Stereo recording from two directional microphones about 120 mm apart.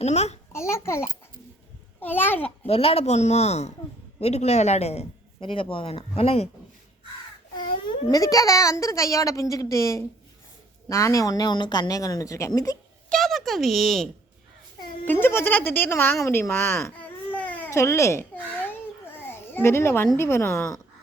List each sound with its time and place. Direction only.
0.0 s speech: 65° left (ahead or behind)
0.5 s a child's voice: 20° left (ahead or behind)
2.6 s speech: 55° left (ahead or behind)
5.4 s speech: 45° left (ahead or behind)
7.5 s baby cry: 40° left (ahead or behind)
8.1 s a child's voice: 30° left (ahead or behind)
13.1 s speech: centre (ahead or behind)
15.0 s speech: 15° left (ahead or behind)
17.7 s babbling: 25° left (ahead or behind)
20.1 s a child's voice: 20° left (ahead or behind)